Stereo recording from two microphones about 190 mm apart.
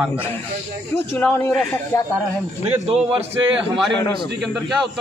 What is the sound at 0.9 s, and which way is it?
Speech, 10° left (ahead or behind).